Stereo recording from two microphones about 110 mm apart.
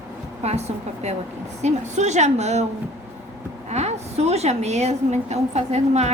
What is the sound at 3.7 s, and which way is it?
A woman's voice, 80° right.